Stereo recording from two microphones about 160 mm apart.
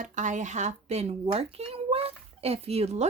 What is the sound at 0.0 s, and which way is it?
A child's voice, 50° right (ahead or behind).